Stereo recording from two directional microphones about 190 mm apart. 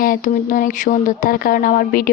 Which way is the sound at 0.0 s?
45° left (ahead or behind).